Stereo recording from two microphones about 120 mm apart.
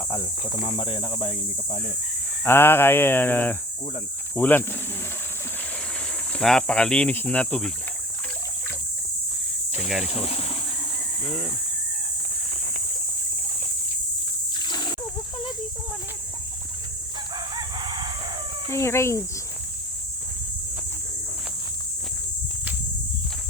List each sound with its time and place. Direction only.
0.8 s speech: 45° left (ahead or behind)
2.4 s speech: 20° left (ahead or behind)
6.3 s speech: 5° left (ahead or behind)
10.1 s speech: 55° left (ahead or behind)
14.6 s splash: 40° left (ahead or behind)
17.3 s crowing: 40° right (ahead or behind)
18.7 s speech: 25° left (ahead or behind)